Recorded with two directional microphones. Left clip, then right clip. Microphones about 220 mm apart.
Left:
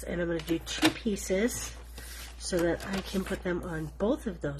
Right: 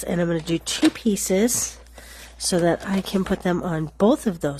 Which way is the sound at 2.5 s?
50° right (ahead or behind).